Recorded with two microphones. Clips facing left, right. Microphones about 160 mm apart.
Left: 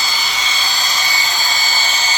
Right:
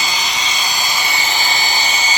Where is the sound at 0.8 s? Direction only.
20° right (ahead or behind).